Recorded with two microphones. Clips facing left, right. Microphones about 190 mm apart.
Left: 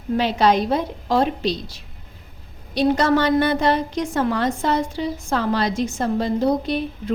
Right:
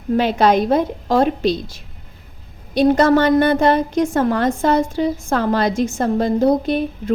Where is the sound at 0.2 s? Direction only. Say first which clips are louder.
Right 3 dB; 50° right (ahead or behind).